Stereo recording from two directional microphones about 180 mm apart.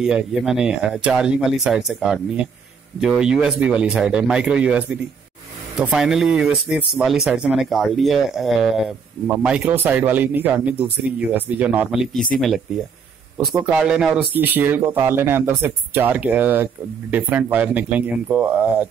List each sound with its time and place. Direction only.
0.0 s speech: 5° right (ahead or behind)
13.7 s speech: 5° right (ahead or behind)